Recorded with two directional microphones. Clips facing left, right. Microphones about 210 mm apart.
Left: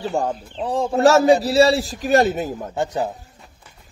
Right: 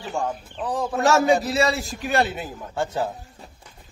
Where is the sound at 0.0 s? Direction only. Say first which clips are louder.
Left 5 dB; 35° left (ahead or behind).